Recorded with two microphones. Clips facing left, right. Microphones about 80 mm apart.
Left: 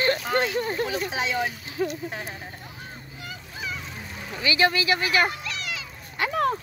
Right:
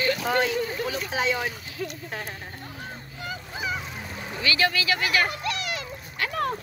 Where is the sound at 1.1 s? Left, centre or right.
Centre.